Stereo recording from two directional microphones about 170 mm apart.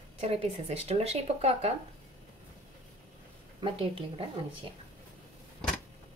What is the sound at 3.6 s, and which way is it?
Speech, 35° right (ahead or behind).